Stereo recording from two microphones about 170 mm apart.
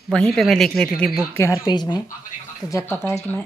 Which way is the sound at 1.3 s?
15° left (ahead or behind).